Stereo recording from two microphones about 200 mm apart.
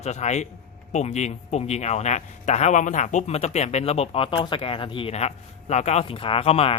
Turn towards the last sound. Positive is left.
turn(degrees=30)  # may be behind; listen again after turning